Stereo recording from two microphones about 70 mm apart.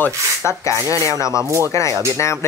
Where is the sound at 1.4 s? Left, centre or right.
Right.